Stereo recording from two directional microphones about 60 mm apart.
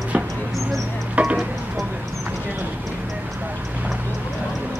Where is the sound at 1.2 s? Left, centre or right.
Right.